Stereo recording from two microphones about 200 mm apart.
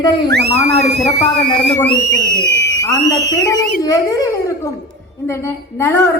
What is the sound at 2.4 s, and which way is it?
Speech, 60° left (ahead or behind).